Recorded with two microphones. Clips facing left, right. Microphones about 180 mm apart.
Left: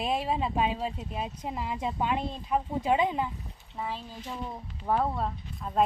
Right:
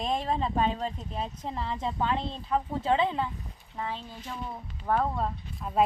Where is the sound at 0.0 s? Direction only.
10° left (ahead or behind).